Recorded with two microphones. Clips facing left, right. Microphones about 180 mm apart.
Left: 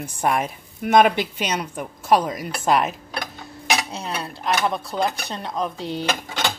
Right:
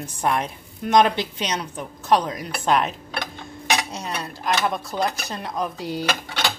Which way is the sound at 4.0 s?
5° left (ahead or behind).